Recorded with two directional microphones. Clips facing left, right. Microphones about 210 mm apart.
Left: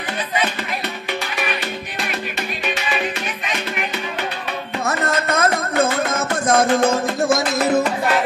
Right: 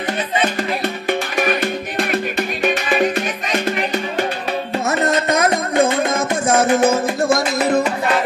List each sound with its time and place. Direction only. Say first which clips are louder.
1.0 s music: right 7 dB; 50° right (ahead or behind)
4.8 s music: right 3 dB; 20° right (ahead or behind); by 7.9 s centre (ahead or behind)